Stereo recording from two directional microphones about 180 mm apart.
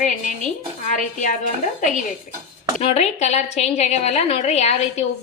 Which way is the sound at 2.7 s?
35° left (ahead or behind).